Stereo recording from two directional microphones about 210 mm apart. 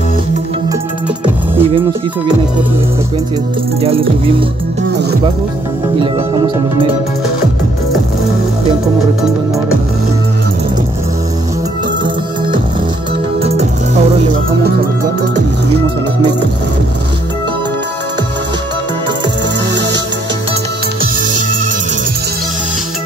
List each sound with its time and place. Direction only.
1.6 s speech: 25° right (ahead or behind)
3.8 s speech: 25° right (ahead or behind)
5.9 s speech: 25° right (ahead or behind)
13.4 s music: 30° right (ahead or behind)